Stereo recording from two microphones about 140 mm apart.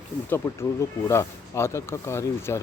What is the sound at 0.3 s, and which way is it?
Speech, 15° left (ahead or behind).